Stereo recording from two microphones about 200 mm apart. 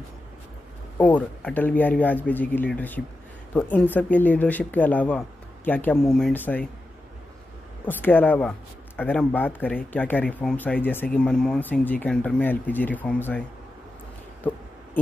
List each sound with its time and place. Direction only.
0.9 s speech: 10° left (ahead or behind)
7.8 s speech: 10° left (ahead or behind)